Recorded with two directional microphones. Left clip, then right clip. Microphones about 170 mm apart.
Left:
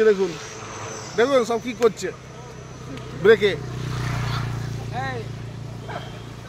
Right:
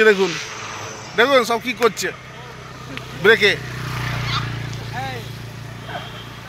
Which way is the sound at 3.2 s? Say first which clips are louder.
Right 2 dB; centre (ahead or behind).